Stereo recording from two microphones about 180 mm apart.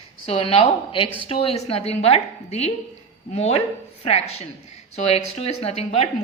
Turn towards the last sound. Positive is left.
turn(degrees=35)  # may be behind; listen again after turning